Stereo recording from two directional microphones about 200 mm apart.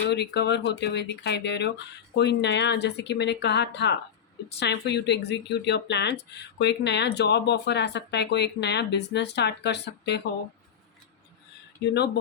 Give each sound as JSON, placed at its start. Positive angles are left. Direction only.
{"t": 0.1, "sound": "speech", "side_deg": 60}